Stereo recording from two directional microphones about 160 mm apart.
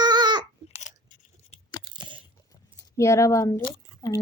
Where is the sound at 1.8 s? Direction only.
30° right (ahead or behind).